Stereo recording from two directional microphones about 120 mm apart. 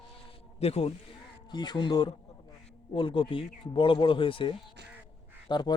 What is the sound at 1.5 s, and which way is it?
Speech, 35° left (ahead or behind).